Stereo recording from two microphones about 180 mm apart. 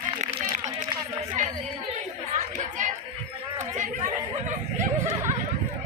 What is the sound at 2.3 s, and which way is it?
Chatter, 45° right (ahead or behind).